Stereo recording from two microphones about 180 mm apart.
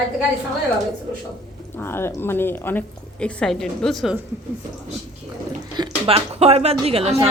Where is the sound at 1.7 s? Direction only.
15° left (ahead or behind).